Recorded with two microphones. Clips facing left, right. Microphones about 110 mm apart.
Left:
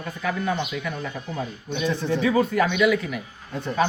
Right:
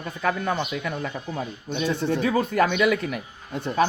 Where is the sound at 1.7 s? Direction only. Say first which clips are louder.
Even; 45° right (ahead or behind).